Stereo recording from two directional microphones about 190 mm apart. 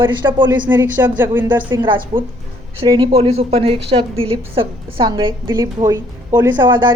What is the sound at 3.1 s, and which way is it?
A woman's voice, 30° right (ahead or behind).